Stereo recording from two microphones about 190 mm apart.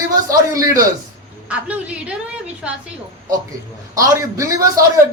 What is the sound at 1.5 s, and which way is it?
A man's voice, 5° right (ahead or behind).